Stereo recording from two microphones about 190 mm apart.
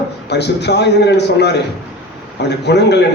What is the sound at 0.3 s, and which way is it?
A man's voice, 60° left (ahead or behind).